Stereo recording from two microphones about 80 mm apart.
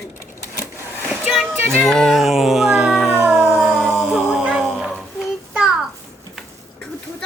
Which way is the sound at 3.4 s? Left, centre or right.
Right.